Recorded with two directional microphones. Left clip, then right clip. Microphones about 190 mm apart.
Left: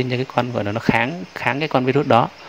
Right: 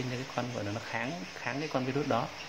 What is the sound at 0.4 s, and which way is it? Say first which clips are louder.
Speech: left 14 dB; 50° left (ahead or behind).